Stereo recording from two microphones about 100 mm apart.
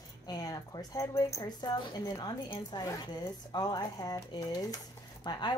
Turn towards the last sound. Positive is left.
turn(degrees=45)  # may be behind; listen again after turning